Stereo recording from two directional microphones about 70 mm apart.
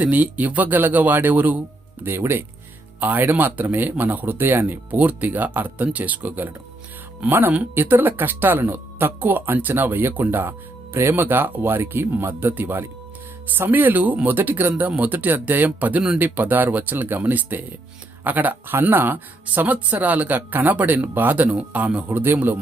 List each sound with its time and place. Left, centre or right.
0.0 s speech: right